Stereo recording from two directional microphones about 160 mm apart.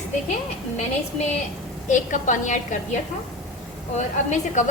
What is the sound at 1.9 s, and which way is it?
A woman's voice, 50° left (ahead or behind).